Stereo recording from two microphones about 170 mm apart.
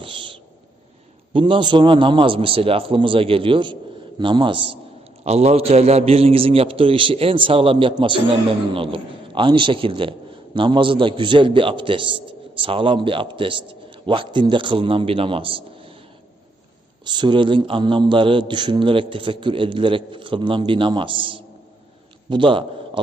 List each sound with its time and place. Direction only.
0.0 s a sound: 30° right (ahead or behind)
1.3 s a man's voice: 30° right (ahead or behind)
17.1 s a man's voice: 25° right (ahead or behind)